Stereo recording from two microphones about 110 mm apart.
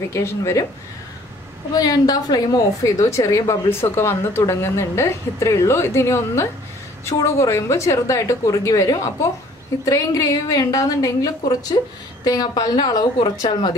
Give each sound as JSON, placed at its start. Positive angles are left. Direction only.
{"t": 0.1, "sound": "a woman's voice", "side_deg": 25}
{"t": 1.8, "sound": "a woman's voice", "side_deg": 35}